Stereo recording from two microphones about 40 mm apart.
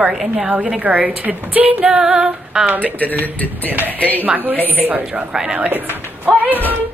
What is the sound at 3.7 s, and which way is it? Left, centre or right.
Speech, right.